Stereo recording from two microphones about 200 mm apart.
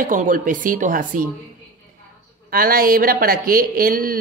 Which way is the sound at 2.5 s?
45° right (ahead or behind).